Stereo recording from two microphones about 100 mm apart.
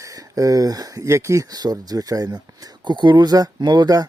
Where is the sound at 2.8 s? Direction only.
50° right (ahead or behind).